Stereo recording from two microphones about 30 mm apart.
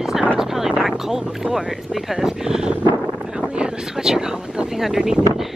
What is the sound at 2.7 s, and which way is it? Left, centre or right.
Wind noise, right.